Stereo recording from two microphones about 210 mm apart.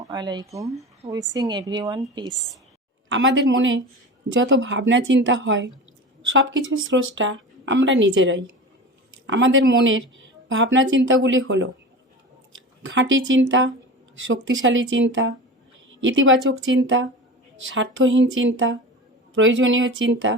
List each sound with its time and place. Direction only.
0.0 s a woman's voice: 20° right (ahead or behind)
3.1 s a woman's voice: 65° right (ahead or behind)
12.8 s speech: 65° right (ahead or behind)